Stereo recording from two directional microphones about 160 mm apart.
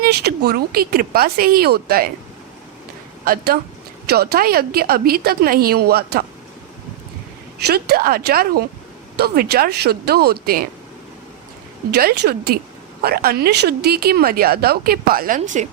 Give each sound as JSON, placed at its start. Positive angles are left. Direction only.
{"t": 0.0, "sound": "speech", "side_deg": -90}
{"t": 3.2, "sound": "speech", "side_deg": -70}
{"t": 4.0, "sound": "speech", "side_deg": -85}
{"t": 7.7, "sound": "speech", "side_deg": -75}
{"t": 11.9, "sound": "speech", "side_deg": -80}
{"t": 15.4, "sound": "a woman's voice", "side_deg": -50}